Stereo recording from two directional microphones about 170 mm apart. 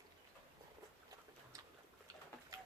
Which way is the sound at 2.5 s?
20° right (ahead or behind).